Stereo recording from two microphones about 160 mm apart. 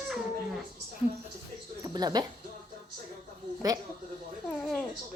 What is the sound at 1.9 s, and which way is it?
Speech, 25° right (ahead or behind).